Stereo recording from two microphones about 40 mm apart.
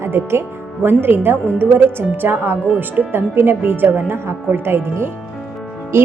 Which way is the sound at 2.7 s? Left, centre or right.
Right.